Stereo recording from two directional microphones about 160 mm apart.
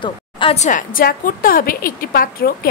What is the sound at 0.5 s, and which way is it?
A woman's voice, 55° left (ahead or behind).